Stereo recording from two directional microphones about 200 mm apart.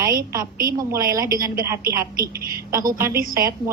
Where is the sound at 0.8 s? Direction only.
15° right (ahead or behind).